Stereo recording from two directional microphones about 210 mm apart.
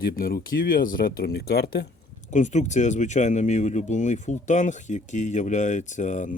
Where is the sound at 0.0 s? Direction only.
45° left (ahead or behind).